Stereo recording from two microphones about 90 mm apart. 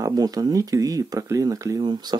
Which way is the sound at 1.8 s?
55° right (ahead or behind).